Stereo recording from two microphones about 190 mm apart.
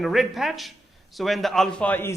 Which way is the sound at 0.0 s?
Centre (ahead or behind).